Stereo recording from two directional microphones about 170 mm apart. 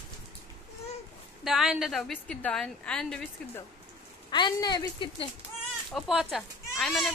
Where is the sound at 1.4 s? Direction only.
Centre (ahead or behind).